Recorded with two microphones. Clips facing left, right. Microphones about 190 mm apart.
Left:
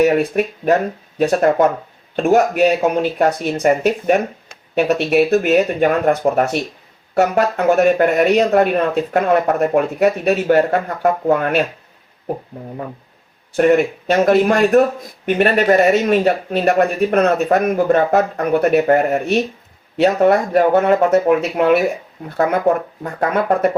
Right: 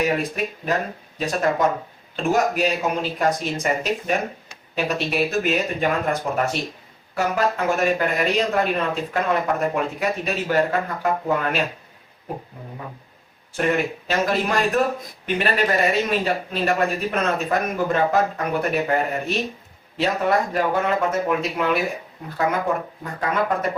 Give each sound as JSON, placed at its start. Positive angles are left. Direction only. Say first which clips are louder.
{"t": 0.0, "sound": "speech", "louder": "left 8 dB", "side_deg": 60}
{"t": 6.3, "sound": "speech", "louder": "left 6 dB", "side_deg": 45}
{"t": 7.2, "sound": "speech", "louder": "left 6 dB", "side_deg": 65}
{"t": 13.6, "sound": "speech", "louder": "left 9 dB", "side_deg": 50}
{"t": 23.2, "sound": "speech", "louder": "left 7 dB", "side_deg": 55}